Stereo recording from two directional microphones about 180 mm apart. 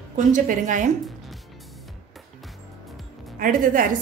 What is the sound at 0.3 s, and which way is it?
Speech, 45° right (ahead or behind).